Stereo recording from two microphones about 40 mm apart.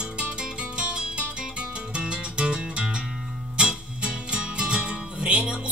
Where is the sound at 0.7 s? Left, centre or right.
Right.